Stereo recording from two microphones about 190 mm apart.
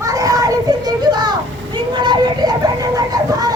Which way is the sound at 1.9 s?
25° right (ahead or behind).